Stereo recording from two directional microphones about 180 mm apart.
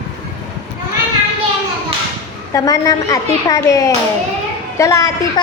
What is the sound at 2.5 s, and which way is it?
A woman's voice, 20° left (ahead or behind).